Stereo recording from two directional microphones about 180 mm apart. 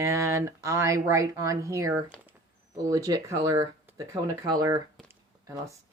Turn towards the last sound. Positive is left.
turn(degrees=-15)  # may be behind; listen again after turning